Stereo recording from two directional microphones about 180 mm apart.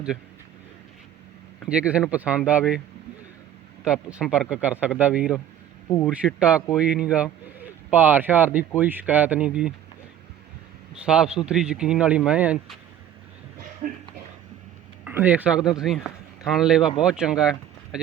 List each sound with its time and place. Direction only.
1.7 s speech: 5° right (ahead or behind)
3.8 s speech: 5° right (ahead or behind)
10.9 s speech: 5° right (ahead or behind)
13.8 s speech: 45° right (ahead or behind)
15.0 s speech: 10° right (ahead or behind)